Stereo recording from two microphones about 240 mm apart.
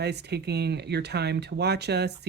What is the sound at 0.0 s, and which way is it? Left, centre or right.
Speech, right.